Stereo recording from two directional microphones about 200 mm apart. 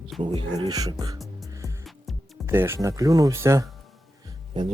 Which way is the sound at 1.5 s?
15° right (ahead or behind).